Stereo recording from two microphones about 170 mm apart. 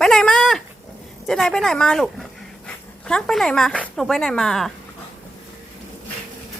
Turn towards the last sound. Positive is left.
turn(degrees=0)  # may be behind; listen again after turning